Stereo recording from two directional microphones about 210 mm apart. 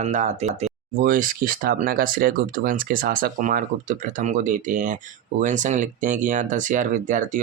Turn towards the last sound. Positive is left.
turn(degrees=-40)  # may be behind; listen again after turning